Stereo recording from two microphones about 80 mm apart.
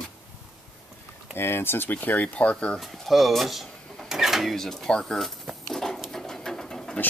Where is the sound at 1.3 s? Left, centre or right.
Left; by 2.8 s centre.